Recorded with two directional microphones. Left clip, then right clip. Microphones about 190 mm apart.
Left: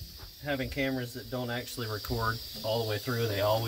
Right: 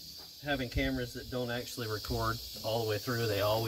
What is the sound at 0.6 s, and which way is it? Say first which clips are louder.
Speech: left 2 dB; 40° left (ahead or behind).